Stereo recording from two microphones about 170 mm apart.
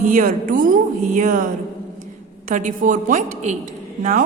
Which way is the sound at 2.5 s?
50° right (ahead or behind).